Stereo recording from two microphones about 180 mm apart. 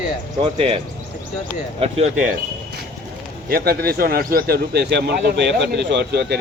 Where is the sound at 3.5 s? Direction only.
60° right (ahead or behind).